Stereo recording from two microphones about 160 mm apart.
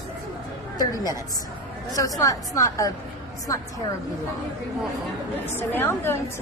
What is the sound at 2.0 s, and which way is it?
Speech, 20° left (ahead or behind).